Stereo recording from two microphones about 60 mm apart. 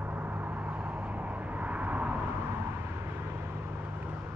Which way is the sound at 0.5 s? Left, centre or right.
Right.